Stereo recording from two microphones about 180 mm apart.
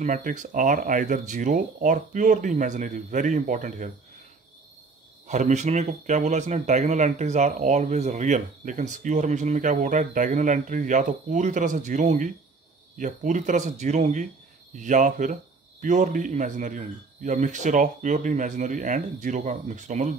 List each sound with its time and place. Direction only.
0.0 s speech: 45° right (ahead or behind)
5.3 s speech: 40° right (ahead or behind)